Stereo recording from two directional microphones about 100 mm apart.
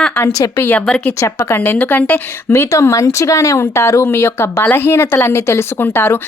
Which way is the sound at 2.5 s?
30° left (ahead or behind).